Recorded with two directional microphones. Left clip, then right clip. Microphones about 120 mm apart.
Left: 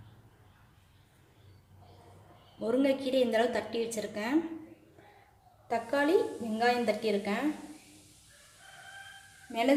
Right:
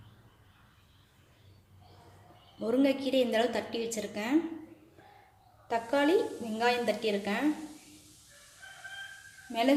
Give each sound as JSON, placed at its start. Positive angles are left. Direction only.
{"t": 2.6, "sound": "a woman's voice", "side_deg": -5}
{"t": 5.6, "sound": "a woman's voice", "side_deg": -10}
{"t": 9.5, "sound": "speech", "side_deg": -5}